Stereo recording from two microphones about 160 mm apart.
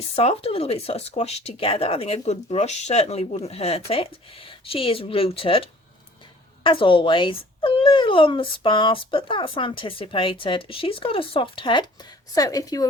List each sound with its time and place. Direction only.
0.2 s a woman's voice: 40° left (ahead or behind); by 12.9 s 20° left (ahead or behind)